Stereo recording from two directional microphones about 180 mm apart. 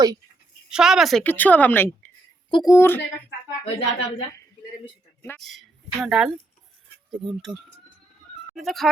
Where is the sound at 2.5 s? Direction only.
25° left (ahead or behind).